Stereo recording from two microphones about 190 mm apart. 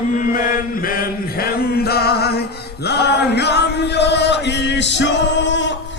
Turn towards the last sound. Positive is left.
turn(degrees=70)  # may be behind; listen again after turning